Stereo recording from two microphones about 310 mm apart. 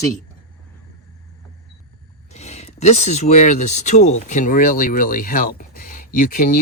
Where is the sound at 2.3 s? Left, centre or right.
Left.